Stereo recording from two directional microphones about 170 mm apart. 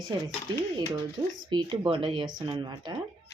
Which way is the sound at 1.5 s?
30° right (ahead or behind).